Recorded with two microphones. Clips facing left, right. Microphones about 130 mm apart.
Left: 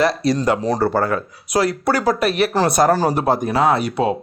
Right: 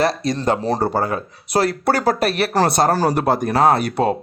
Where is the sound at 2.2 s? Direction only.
35° right (ahead or behind).